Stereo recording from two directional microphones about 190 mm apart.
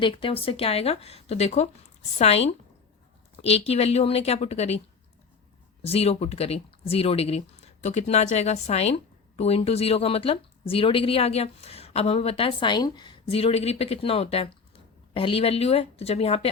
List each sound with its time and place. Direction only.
0.0 s speech: 30° left (ahead or behind)
5.8 s speech: 30° left (ahead or behind)